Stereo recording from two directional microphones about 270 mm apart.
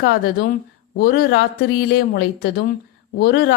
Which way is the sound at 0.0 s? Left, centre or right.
Left.